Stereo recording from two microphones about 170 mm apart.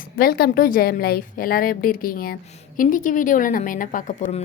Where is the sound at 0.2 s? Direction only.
65° left (ahead or behind).